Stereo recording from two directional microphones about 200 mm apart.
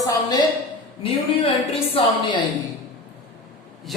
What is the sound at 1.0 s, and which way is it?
A woman's voice, 30° left (ahead or behind).